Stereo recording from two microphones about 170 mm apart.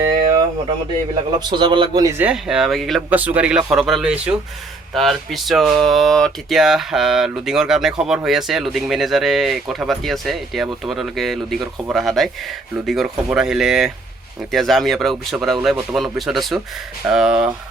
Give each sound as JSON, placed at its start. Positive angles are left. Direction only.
{"t": 1.4, "sound": "a man's voice", "side_deg": -25}
{"t": 2.0, "sound": "speech", "side_deg": -10}